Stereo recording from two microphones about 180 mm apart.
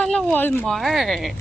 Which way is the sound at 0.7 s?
Centre (ahead or behind).